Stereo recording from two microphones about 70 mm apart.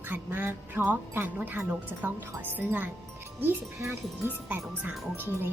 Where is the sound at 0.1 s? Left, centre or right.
Right.